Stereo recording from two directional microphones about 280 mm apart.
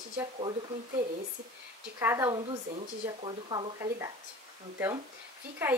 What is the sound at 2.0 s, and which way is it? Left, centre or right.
A woman's voice, centre.